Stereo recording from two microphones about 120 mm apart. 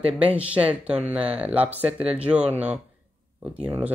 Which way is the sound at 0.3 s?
10° right (ahead or behind).